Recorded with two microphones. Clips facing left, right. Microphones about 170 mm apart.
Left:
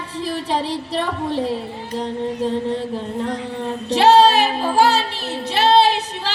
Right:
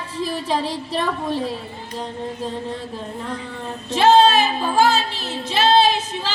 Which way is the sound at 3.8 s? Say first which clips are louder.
Left 1 dB; 70° left (ahead or behind).